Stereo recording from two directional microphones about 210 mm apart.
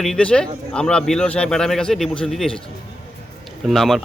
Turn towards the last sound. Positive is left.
turn(degrees=0)  # may be behind; listen again after turning